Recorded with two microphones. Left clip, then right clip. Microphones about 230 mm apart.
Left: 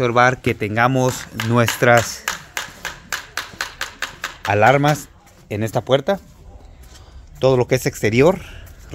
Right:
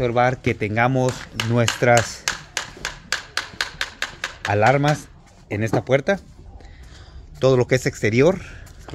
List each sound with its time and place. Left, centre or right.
0.0 s speech: centre
1.4 s speech: right
1.8 s speech: centre
2.2 s a sound: right
4.5 s speech: centre
7.3 s speech: centre